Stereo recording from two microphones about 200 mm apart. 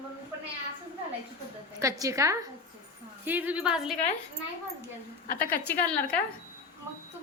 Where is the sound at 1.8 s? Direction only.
15° right (ahead or behind).